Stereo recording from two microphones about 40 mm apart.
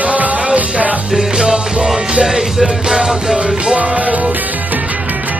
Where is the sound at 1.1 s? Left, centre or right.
Centre.